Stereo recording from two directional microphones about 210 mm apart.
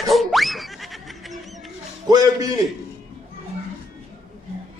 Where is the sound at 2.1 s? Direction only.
15° right (ahead or behind).